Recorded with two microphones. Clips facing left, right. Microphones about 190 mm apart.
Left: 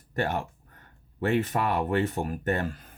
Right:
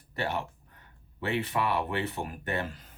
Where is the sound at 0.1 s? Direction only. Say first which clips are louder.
Left 4 dB; 50° left (ahead or behind).